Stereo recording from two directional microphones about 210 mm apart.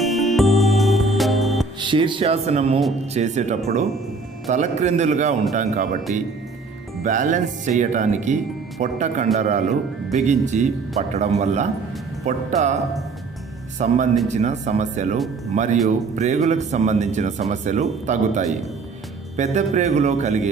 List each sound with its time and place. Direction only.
0.0 s music: centre (ahead or behind)
1.8 s a man's voice: 25° right (ahead or behind); by 6.0 s 40° right (ahead or behind)
7.0 s a man's voice: 40° right (ahead or behind)
13.7 s a man's voice: 35° right (ahead or behind)